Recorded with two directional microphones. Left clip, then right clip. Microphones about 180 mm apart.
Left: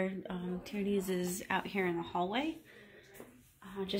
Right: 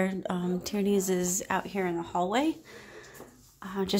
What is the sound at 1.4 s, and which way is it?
Speech, 10° right (ahead or behind).